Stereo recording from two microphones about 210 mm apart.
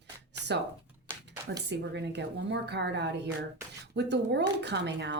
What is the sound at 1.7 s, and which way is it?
Speech, 55° right (ahead or behind).